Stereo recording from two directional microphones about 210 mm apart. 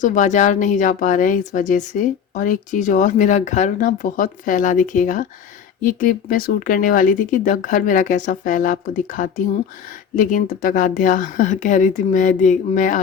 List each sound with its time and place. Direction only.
0.0 s speech: 35° left (ahead or behind)